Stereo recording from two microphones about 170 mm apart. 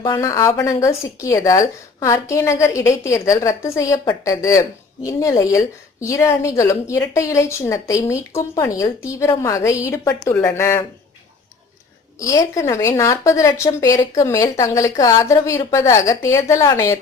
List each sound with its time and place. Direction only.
0.0 s a woman's voice: 20° left (ahead or behind)
12.2 s a woman's voice: 20° left (ahead or behind)